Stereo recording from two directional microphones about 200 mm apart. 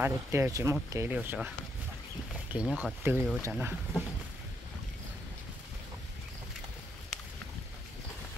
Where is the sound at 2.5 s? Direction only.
5° right (ahead or behind).